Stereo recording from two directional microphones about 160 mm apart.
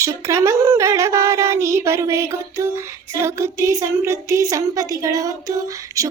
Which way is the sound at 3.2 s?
15° right (ahead or behind).